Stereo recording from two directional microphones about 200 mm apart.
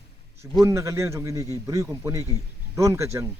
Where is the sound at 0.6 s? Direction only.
15° right (ahead or behind).